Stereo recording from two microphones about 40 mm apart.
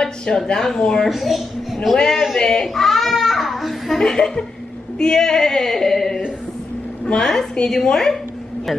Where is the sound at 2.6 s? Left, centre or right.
Centre.